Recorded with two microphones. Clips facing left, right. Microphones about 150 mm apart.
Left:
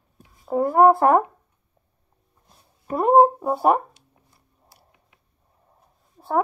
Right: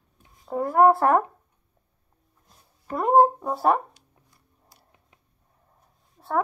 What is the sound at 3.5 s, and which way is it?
Speech, 20° left (ahead or behind).